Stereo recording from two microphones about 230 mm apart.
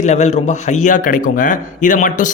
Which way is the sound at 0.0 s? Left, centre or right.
Left.